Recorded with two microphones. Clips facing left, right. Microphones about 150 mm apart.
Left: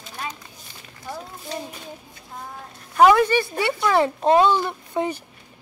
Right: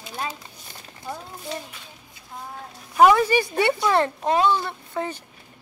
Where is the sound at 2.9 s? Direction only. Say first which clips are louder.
Left 1 dB; 5° right (ahead or behind).